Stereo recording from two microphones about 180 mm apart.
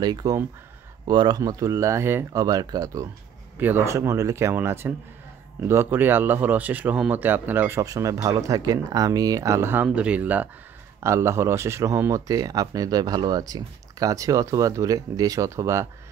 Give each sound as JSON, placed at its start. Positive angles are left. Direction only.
{"t": 0.0, "sound": "speech", "side_deg": -20}